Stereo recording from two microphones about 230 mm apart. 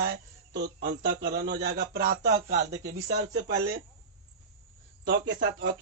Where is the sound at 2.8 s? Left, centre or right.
Right.